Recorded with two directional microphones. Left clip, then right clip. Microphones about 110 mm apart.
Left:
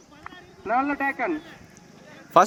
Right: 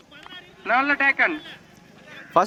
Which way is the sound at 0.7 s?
35° right (ahead or behind).